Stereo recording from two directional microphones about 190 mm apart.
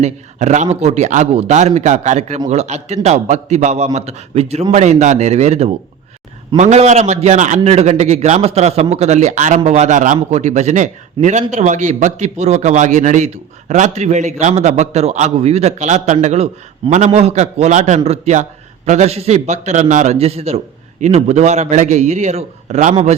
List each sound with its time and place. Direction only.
0.0 s a man's voice: 40° right (ahead or behind)